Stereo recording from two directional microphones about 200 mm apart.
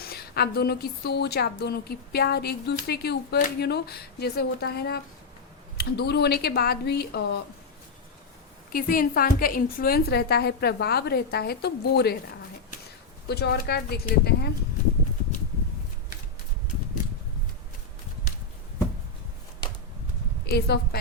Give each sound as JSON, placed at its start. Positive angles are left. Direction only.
{"t": 0.0, "sound": "a woman's voice", "side_deg": 50}
{"t": 8.7, "sound": "a woman's voice", "side_deg": 45}
{"t": 13.2, "sound": "a woman's voice", "side_deg": 55}
{"t": 20.5, "sound": "a woman's voice", "side_deg": 55}